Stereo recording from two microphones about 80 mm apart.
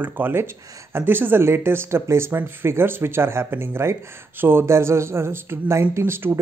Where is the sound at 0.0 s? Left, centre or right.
Right.